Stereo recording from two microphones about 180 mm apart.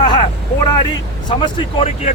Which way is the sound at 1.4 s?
25° left (ahead or behind).